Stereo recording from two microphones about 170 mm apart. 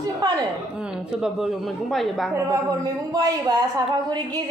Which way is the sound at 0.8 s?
5° right (ahead or behind).